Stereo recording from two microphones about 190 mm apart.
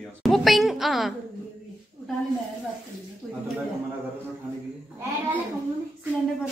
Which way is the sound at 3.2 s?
Centre (ahead or behind).